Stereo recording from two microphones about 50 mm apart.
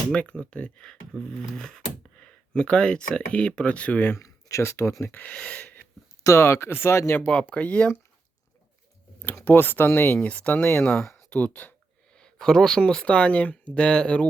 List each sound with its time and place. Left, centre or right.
0.1 s speech: left
4.2 s speech: left
5.3 s speech: left
6.2 s speech: left
7.3 s speech: left
9.4 s speech: left
10.4 s speech: left
12.1 s a sound: centre
12.8 s speech: centre
13.1 s speech: left